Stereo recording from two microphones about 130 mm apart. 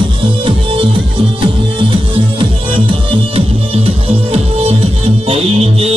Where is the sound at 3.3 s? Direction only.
50° right (ahead or behind).